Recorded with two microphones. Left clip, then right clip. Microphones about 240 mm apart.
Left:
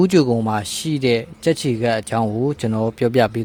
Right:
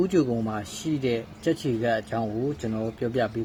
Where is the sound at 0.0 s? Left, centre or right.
Left.